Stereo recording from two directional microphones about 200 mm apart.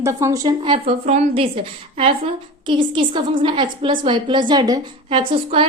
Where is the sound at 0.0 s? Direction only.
15° right (ahead or behind).